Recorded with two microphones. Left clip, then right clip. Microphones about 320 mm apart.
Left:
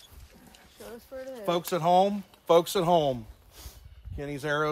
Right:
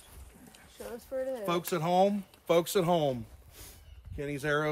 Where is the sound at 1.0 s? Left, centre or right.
Right.